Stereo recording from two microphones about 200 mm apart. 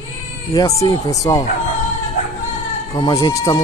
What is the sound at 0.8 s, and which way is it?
Speech, 15° left (ahead or behind).